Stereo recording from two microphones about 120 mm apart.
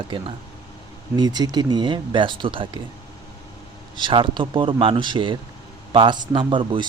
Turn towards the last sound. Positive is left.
turn(degrees=-45)  # may be behind; listen again after turning